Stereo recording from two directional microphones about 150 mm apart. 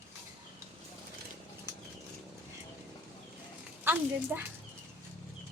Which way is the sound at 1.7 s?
20° right (ahead or behind).